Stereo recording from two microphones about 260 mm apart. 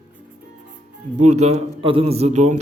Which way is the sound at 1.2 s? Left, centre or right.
Right.